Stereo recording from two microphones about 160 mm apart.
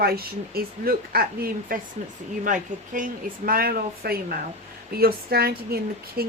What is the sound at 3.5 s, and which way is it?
Speech, 65° right (ahead or behind).